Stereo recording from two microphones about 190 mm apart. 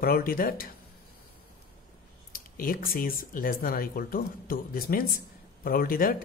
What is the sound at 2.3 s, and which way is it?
Speech, 50° left (ahead or behind).